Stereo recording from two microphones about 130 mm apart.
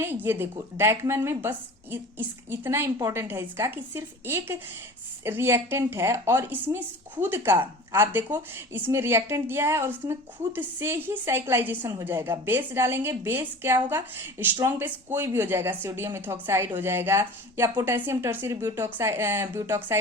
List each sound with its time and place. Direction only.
0.0 s speech: 15° right (ahead or behind)